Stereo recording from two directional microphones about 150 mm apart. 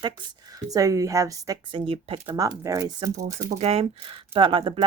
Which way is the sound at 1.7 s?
35° right (ahead or behind).